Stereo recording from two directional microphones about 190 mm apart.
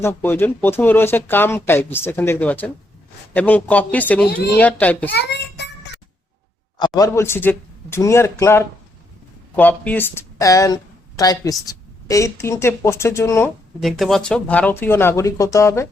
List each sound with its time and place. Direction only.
0.0 s speech: 10° left (ahead or behind)
5.1 s child singing: 65° left (ahead or behind)
6.7 s speech: 20° left (ahead or behind)
13.8 s speech: centre (ahead or behind)